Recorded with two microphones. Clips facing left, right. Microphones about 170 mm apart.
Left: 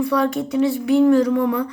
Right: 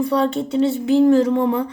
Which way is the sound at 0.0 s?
30° right (ahead or behind).